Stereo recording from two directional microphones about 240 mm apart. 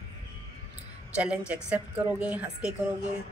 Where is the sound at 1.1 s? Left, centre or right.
Centre.